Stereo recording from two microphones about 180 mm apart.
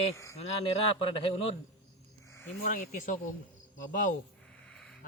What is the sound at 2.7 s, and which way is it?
Speech, 50° left (ahead or behind).